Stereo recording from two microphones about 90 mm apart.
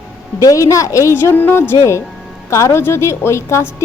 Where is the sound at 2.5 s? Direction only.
35° left (ahead or behind).